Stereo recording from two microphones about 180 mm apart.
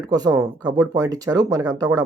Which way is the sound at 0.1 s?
20° right (ahead or behind).